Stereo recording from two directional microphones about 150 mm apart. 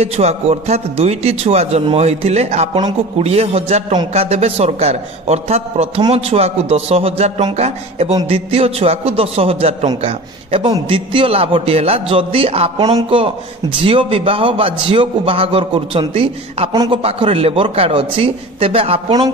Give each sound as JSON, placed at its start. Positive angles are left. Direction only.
{"t": 0.0, "sound": "a man's voice", "side_deg": -45}